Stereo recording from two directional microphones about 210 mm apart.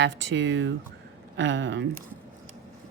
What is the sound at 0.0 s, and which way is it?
Speech, 60° right (ahead or behind).